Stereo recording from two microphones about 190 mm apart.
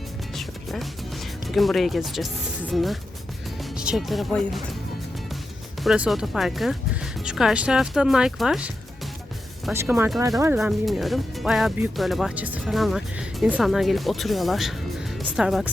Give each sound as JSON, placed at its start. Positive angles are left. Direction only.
{"t": 0.3, "sound": "speech", "side_deg": 0}
{"t": 5.8, "sound": "speech", "side_deg": 0}
{"t": 9.7, "sound": "speech", "side_deg": -10}
{"t": 10.6, "sound": "speech", "side_deg": 0}